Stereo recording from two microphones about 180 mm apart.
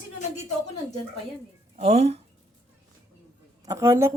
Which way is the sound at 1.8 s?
35° right (ahead or behind).